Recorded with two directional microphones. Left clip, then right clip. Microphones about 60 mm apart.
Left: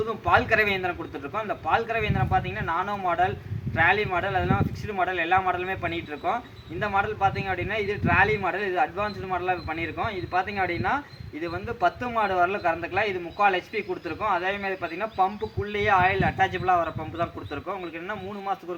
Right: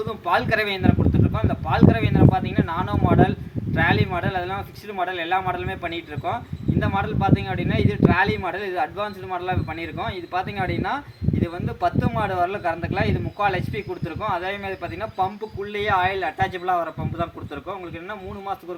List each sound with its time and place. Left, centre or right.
0.0 s speech: right; by 18.8 s centre